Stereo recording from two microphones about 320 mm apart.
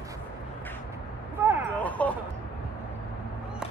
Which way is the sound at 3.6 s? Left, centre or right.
Centre.